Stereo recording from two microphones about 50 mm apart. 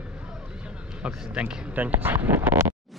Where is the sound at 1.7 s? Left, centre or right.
Right.